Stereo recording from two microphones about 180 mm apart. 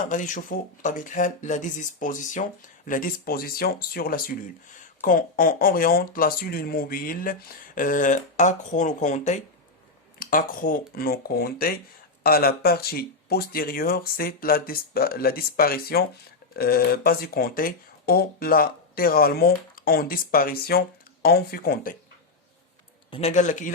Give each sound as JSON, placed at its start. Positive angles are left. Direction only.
{"t": 0.0, "sound": "speech", "side_deg": 45}
{"t": 23.1, "sound": "speech", "side_deg": 40}